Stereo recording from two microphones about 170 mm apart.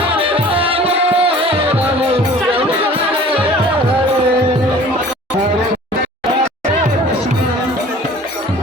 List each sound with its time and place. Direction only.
0.0 s music: 35° right (ahead or behind)